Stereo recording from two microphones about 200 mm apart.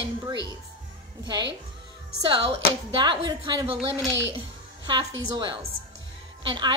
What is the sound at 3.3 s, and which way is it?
Speech, 20° right (ahead or behind).